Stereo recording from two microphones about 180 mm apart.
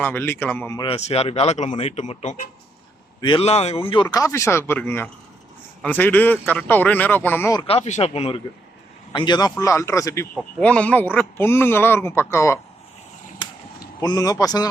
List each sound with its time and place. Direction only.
0.0 s a man's voice: 10° left (ahead or behind)
0.8 s speech: 35° left (ahead or behind)
3.2 s a man's voice: 25° left (ahead or behind)
7.7 s a man's voice: 40° left (ahead or behind); by 10.2 s 15° left (ahead or behind)
10.3 s a man's voice: 5° left (ahead or behind)
14.0 s speech: 20° left (ahead or behind)